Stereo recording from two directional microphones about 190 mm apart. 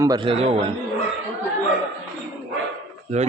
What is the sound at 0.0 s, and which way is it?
Speech, 20° right (ahead or behind).